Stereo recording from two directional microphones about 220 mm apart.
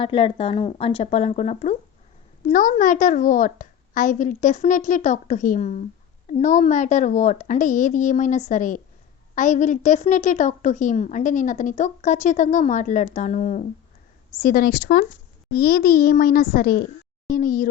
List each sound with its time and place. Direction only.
0.0 s a woman's voice: 25° left (ahead or behind); by 17.7 s 40° left (ahead or behind)